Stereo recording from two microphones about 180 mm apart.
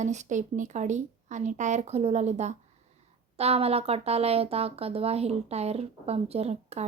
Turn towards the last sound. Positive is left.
turn(degrees=-35)  # may be behind; listen again after turning